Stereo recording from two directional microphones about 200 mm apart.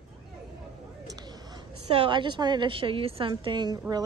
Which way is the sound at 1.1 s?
20° right (ahead or behind).